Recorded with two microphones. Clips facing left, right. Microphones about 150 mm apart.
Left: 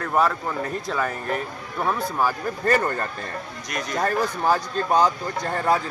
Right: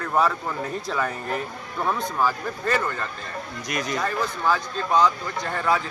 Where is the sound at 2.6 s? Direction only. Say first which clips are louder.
Left 4 dB; 45° left (ahead or behind).